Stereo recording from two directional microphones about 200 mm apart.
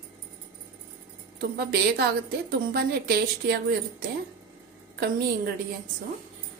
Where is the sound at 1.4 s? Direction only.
55° right (ahead or behind).